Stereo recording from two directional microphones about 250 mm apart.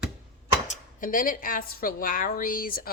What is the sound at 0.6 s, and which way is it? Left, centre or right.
A woman's voice, left.